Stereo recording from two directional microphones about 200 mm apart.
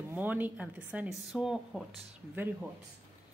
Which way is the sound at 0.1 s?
10° right (ahead or behind).